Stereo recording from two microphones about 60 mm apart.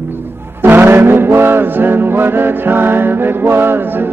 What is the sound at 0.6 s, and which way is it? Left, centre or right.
Music, right.